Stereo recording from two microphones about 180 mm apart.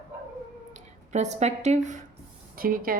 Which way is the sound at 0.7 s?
40° right (ahead or behind).